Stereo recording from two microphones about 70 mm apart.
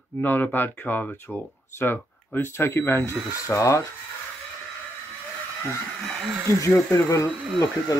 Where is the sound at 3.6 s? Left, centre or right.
Left.